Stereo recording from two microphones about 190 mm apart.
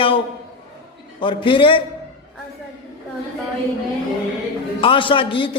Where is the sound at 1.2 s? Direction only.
25° left (ahead or behind).